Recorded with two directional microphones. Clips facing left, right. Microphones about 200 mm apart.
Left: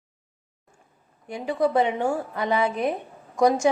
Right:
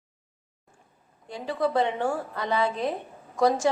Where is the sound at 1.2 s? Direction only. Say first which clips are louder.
Left 3 dB; 15° left (ahead or behind).